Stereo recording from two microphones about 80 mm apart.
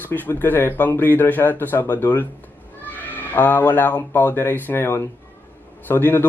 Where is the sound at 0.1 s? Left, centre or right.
Left.